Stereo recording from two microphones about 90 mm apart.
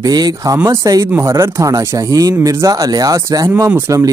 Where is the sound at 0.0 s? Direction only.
45° right (ahead or behind).